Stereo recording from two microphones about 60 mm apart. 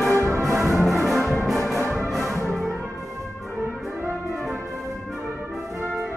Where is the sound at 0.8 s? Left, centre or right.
Centre.